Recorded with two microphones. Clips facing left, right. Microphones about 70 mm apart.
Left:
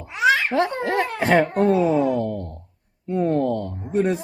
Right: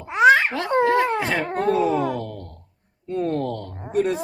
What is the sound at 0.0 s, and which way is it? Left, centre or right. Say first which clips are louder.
Babbling: right 4 dB; right.